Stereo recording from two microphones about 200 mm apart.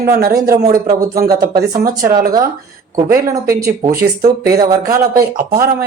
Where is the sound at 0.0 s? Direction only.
50° right (ahead or behind).